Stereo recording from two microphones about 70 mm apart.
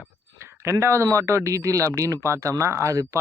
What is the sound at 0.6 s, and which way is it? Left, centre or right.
Speech, right.